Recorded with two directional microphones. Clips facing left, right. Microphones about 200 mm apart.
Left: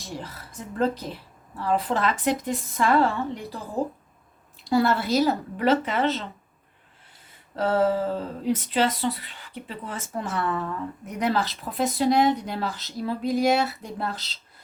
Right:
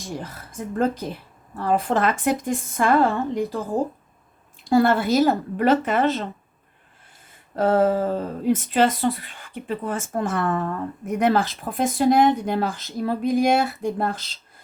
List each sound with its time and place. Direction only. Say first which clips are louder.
0.2 s speech: right 5 dB; 45° right (ahead or behind)
4.6 s speech: right 4 dB; 50° right (ahead or behind)
7.5 s speech: right 3 dB; 50° right (ahead or behind)